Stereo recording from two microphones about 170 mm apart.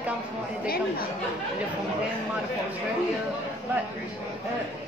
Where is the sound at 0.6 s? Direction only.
60° left (ahead or behind).